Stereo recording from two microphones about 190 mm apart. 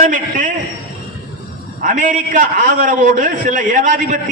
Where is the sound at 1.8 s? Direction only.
45° right (ahead or behind).